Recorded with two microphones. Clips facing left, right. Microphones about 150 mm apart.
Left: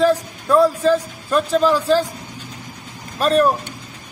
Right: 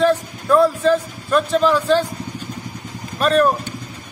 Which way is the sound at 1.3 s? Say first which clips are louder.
Even; 35° left (ahead or behind).